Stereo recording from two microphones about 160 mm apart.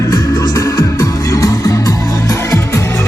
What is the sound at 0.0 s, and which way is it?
Music, 20° left (ahead or behind).